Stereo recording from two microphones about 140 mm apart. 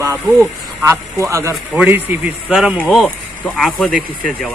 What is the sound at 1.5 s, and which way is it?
Speech, 10° right (ahead or behind).